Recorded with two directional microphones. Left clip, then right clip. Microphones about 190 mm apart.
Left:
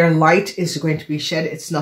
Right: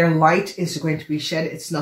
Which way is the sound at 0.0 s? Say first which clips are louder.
Left 2 dB; 45° left (ahead or behind).